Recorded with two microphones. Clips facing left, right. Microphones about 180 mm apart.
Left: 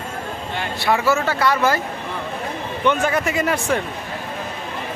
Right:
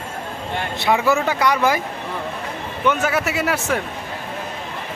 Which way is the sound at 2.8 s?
5° right (ahead or behind).